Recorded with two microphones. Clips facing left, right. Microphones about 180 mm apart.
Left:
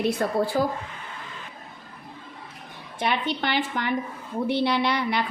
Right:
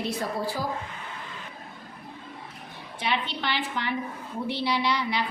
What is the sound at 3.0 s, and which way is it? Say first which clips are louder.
A woman's voice: left 4 dB; 50° left (ahead or behind).